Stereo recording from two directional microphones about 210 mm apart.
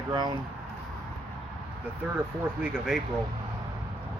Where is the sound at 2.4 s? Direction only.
5° right (ahead or behind).